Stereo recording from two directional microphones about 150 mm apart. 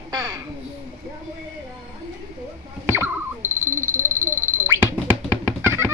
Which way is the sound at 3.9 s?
55° right (ahead or behind).